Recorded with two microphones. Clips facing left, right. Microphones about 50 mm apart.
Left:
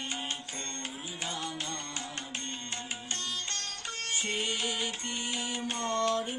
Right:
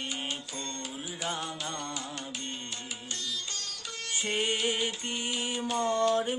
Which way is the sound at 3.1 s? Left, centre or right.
Left.